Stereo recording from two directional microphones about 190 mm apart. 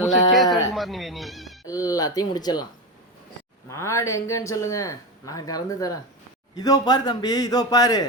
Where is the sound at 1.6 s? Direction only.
20° left (ahead or behind).